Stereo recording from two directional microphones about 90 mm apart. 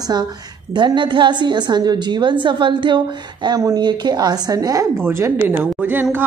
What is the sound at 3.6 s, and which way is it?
A woman's voice, 50° right (ahead or behind).